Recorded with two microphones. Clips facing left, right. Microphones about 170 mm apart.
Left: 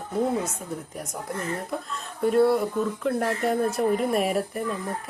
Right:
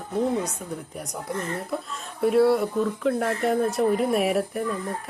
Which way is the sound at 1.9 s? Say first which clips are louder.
Right 1 dB; centre (ahead or behind).